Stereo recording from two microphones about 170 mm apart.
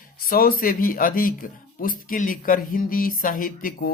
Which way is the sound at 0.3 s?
60° left (ahead or behind).